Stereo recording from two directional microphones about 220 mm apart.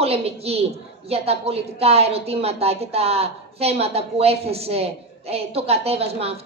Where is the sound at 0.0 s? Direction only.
25° right (ahead or behind).